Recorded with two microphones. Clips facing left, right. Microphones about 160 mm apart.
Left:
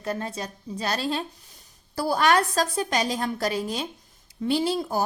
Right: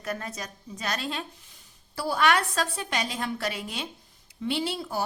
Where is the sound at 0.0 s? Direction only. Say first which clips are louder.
Left 4 dB; 30° left (ahead or behind).